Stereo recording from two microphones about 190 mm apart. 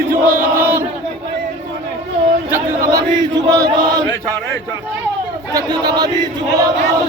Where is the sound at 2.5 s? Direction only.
15° right (ahead or behind).